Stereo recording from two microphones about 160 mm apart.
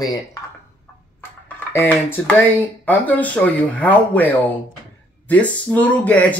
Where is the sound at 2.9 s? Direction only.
10° left (ahead or behind).